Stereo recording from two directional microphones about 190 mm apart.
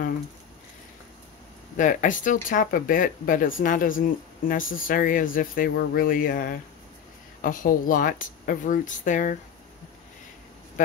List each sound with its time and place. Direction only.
1.8 s speech: 45° left (ahead or behind)